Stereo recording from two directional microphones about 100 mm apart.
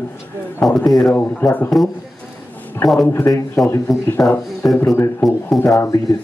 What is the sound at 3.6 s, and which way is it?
Speech, centre (ahead or behind).